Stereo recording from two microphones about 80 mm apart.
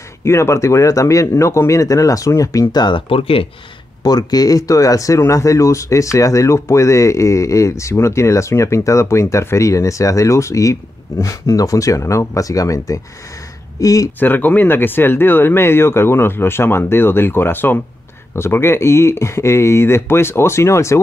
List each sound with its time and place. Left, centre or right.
0.2 s speech: left
2.7 s speech: left
4.0 s speech: left
14.2 s speech: left